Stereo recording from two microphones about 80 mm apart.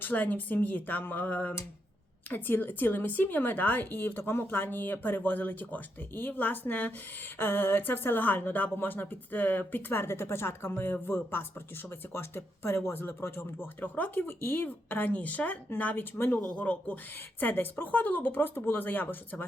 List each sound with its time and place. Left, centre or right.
0.0 s speech: left
16.6 s speech: centre